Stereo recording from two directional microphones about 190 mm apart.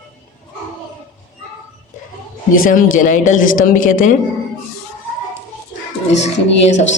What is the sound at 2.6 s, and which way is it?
Speech, 45° left (ahead or behind).